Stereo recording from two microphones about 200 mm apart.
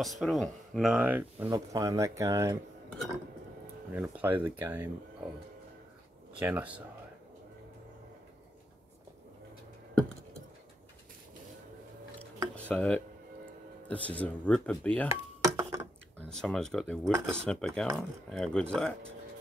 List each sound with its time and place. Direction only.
0.0 s speech: centre (ahead or behind); by 2.6 s 15° right (ahead or behind)
3.9 s speech: 10° right (ahead or behind)
6.4 s speech: 10° right (ahead or behind)
12.6 s speech: 5° left (ahead or behind)
15.0 s dishes: 15° right (ahead or behind)
16.2 s speech: 5° left (ahead or behind)